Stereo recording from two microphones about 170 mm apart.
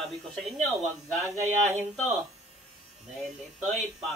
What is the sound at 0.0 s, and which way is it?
Speech, centre (ahead or behind).